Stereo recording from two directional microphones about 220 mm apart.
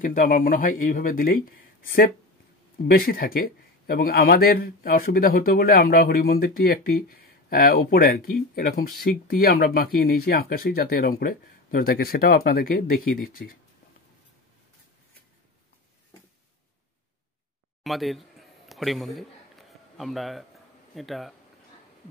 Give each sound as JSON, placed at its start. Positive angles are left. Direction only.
{"t": 0.0, "sound": "a man's voice", "side_deg": 35}
{"t": 17.8, "sound": "speech", "side_deg": 0}
{"t": 18.7, "sound": "a sound", "side_deg": 0}
{"t": 20.9, "sound": "speech", "side_deg": 0}